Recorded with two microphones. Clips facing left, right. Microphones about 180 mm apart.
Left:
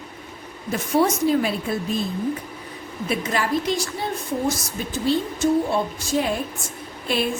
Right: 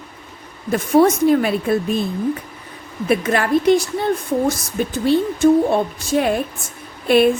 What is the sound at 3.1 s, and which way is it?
Speech, 60° right (ahead or behind).